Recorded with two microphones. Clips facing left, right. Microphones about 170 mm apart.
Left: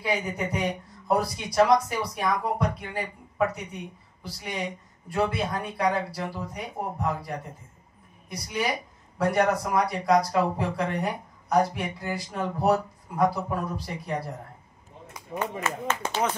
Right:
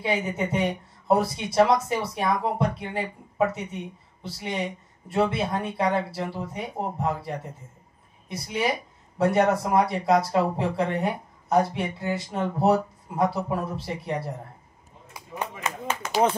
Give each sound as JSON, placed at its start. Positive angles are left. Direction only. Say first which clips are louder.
{"t": 0.0, "sound": "speech", "louder": "right 2 dB", "side_deg": -25}
{"t": 15.1, "sound": "speech", "louder": "left 3 dB", "side_deg": -15}